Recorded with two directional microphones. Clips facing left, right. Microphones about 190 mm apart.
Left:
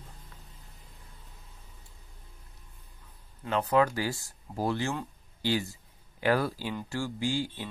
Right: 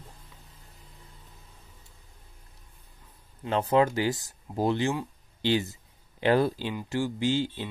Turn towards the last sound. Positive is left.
turn(degrees=-20)  # may be behind; listen again after turning